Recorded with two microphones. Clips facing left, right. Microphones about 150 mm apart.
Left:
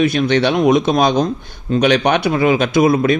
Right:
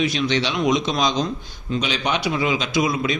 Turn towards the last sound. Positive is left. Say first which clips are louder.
# left 8 dB
turn(degrees=55)  # may be behind; listen again after turning